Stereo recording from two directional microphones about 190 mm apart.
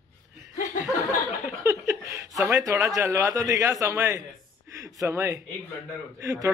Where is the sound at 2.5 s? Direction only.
15° right (ahead or behind).